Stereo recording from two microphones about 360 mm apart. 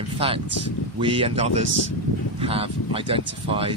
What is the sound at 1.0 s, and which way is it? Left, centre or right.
Speech, centre.